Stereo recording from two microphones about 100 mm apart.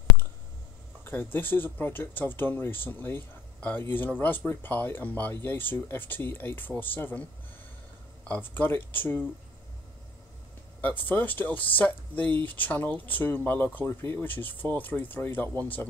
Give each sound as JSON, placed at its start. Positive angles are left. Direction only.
{"t": 1.0, "sound": "speech", "side_deg": 20}
{"t": 8.3, "sound": "speech", "side_deg": 20}
{"t": 11.1, "sound": "speech", "side_deg": 20}